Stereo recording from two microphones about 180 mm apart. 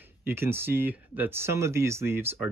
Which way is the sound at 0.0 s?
10° right (ahead or behind).